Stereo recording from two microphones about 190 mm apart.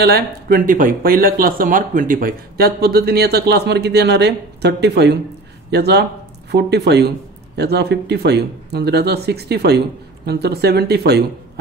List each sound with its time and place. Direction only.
0.0 s speech: 55° right (ahead or behind)